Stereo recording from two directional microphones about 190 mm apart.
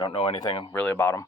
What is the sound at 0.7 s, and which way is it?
Speech, 10° left (ahead or behind).